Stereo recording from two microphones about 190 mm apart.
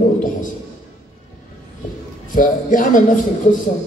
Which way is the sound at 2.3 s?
45° left (ahead or behind).